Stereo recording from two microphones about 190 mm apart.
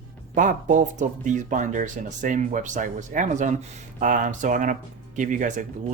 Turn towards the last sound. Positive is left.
turn(degrees=-40)  # may be behind; listen again after turning